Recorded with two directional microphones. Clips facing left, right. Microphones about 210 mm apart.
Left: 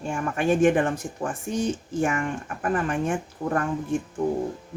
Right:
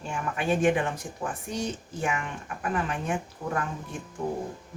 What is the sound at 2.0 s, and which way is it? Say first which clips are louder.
Speech: left 5 dB; 45° left (ahead or behind).